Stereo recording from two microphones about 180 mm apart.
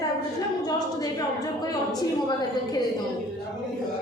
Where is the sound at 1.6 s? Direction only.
20° left (ahead or behind).